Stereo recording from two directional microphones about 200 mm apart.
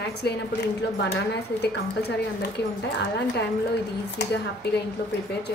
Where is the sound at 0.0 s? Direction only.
55° left (ahead or behind).